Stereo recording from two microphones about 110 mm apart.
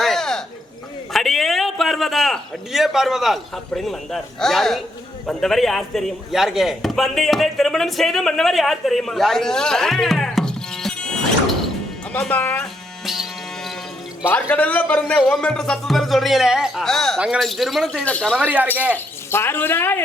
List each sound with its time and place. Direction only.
0.0 s a sound: 5° left (ahead or behind)
1.1 s a man's voice: centre (ahead or behind)
14.3 s a man's voice: 15° left (ahead or behind); by 18.0 s centre (ahead or behind)
18.0 s speech: 10° left (ahead or behind)
18.3 s speech: 15° right (ahead or behind)
19.3 s a woman's voice: 20° left (ahead or behind)